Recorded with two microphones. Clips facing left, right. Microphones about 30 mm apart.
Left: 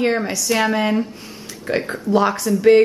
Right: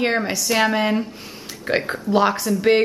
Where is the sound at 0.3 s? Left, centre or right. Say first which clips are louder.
Even; centre.